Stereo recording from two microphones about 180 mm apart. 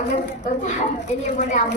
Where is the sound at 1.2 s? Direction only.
40° left (ahead or behind).